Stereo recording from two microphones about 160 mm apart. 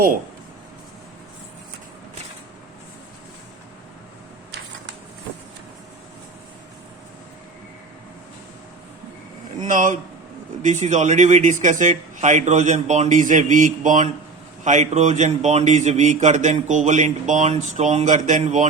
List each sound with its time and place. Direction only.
9.6 s speech: 50° right (ahead or behind)